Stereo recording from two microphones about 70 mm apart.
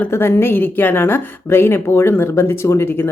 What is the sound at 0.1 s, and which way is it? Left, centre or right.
A woman's voice, left.